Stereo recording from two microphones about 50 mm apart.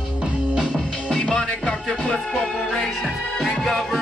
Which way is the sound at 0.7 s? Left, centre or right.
Centre.